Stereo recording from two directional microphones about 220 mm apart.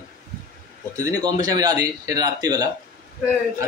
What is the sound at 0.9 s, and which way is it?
A man's voice, 15° right (ahead or behind).